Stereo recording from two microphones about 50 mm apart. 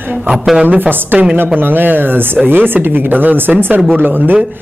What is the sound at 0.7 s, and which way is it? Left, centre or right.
Speech, right.